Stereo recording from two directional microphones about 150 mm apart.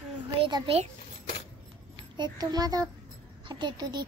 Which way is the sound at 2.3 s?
25° right (ahead or behind).